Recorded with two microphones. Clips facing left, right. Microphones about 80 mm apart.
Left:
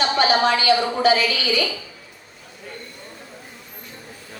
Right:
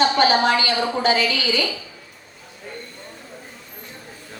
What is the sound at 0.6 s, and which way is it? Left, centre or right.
Speech, right.